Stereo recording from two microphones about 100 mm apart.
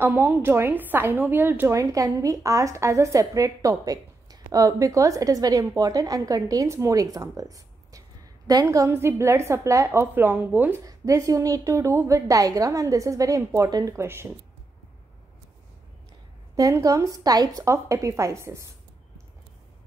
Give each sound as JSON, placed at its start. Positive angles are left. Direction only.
{"t": 0.0, "sound": "a woman's voice", "side_deg": -20}
{"t": 1.7, "sound": "a woman's voice", "side_deg": -35}
{"t": 10.8, "sound": "a woman's voice", "side_deg": -35}
{"t": 13.9, "sound": "a woman's voice", "side_deg": -25}
{"t": 16.5, "sound": "a woman's voice", "side_deg": -35}